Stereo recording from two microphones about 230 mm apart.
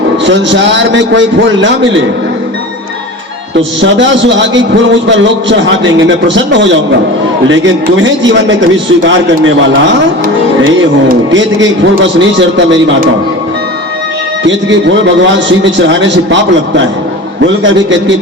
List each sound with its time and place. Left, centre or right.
0.3 s a man's voice: right
3.8 s a man's voice: right
11.3 s a man's voice: right
14.4 s a man's voice: right